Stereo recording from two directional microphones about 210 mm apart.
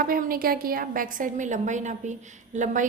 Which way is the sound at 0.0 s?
45° right (ahead or behind).